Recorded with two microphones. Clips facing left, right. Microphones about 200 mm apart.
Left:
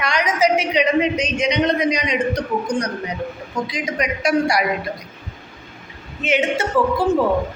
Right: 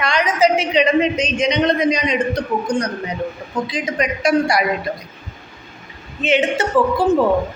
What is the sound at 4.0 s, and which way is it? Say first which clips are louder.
Speech: right 2 dB; 10° left (ahead or behind).